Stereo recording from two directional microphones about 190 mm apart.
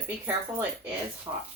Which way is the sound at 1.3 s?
25° right (ahead or behind).